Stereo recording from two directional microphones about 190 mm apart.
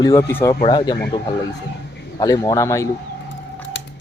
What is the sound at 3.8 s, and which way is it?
Squish, 65° left (ahead or behind).